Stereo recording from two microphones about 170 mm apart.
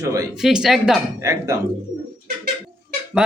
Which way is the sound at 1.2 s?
20° right (ahead or behind).